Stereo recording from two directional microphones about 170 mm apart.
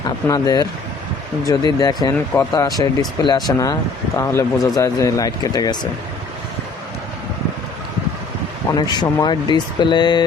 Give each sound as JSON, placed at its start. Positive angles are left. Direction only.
{"t": 0.3, "sound": "speech", "side_deg": 25}
{"t": 8.7, "sound": "speech", "side_deg": 25}